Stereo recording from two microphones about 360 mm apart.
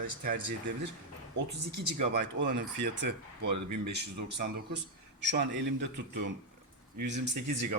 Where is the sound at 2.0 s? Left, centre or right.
Right.